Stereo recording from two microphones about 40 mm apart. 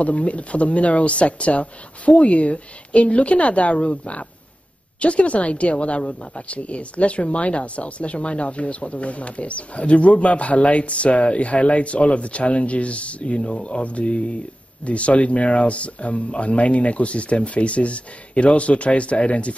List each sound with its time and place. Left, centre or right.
0.0 s a woman's voice: left